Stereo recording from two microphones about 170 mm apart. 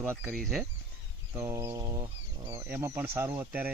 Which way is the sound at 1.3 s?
15° right (ahead or behind).